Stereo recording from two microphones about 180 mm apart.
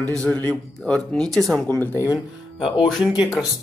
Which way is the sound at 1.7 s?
15° left (ahead or behind).